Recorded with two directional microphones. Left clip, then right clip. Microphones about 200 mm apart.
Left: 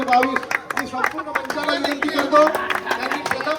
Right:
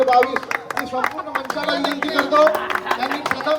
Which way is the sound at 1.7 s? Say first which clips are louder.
Right 1 dB; 50° right (ahead or behind).